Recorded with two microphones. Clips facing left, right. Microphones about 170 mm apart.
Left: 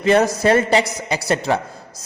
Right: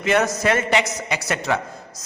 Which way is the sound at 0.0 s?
35° left (ahead or behind).